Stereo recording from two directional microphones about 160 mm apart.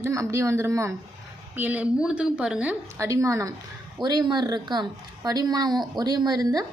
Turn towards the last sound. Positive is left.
turn(degrees=-25)  # may be behind; listen again after turning